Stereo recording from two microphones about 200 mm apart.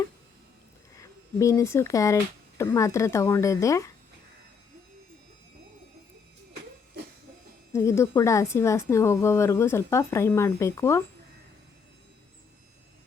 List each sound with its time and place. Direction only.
1.4 s speech: 15° left (ahead or behind)
7.7 s speech: 15° left (ahead or behind)